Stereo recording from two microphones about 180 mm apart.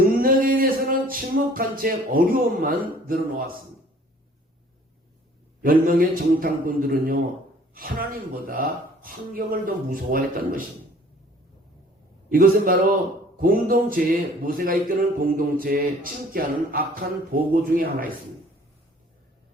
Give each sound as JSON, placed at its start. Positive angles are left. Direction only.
{"t": 0.0, "sound": "a sound", "side_deg": -50}
{"t": 5.6, "sound": "speech", "side_deg": -50}
{"t": 12.3, "sound": "speech", "side_deg": -50}